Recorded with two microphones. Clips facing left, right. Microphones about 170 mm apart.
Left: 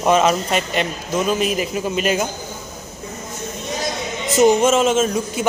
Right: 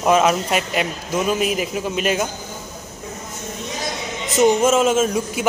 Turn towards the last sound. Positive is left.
turn(degrees=-5)  # may be behind; listen again after turning